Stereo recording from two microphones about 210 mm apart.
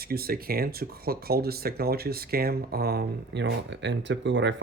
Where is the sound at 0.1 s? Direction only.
45° right (ahead or behind).